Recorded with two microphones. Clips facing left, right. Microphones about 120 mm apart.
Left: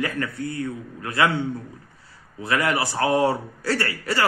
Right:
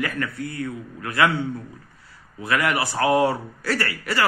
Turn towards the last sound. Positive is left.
turn(degrees=30)  # may be behind; listen again after turning